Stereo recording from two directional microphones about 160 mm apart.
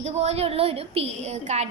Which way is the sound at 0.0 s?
40° right (ahead or behind).